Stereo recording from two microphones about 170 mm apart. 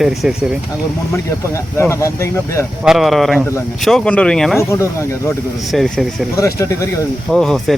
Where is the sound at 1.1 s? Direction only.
15° left (ahead or behind).